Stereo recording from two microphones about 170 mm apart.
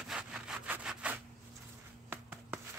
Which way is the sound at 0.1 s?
5° right (ahead or behind).